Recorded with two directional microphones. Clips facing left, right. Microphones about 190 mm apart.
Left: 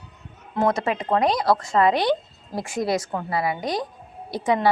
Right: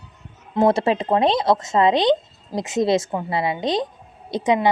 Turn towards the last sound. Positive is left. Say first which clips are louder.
# right 3 dB
turn(degrees=-20)  # may be behind; listen again after turning